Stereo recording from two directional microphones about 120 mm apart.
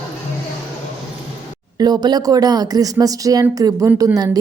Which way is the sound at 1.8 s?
35° right (ahead or behind).